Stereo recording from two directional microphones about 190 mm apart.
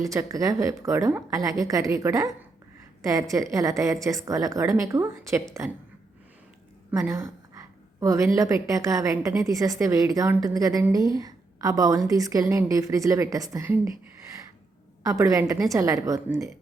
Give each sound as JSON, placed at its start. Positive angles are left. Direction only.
{"t": 0.0, "sound": "a woman's voice", "side_deg": -15}
{"t": 7.1, "sound": "a woman's voice", "side_deg": -15}
{"t": 15.0, "sound": "a woman's voice", "side_deg": -15}